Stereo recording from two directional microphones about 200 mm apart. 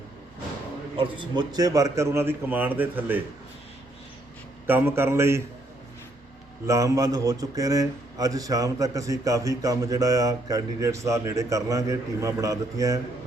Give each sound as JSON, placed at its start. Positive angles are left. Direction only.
{"t": 0.9, "sound": "a man's voice", "side_deg": -25}
{"t": 4.6, "sound": "a man's voice", "side_deg": -10}
{"t": 6.7, "sound": "a man's voice", "side_deg": -15}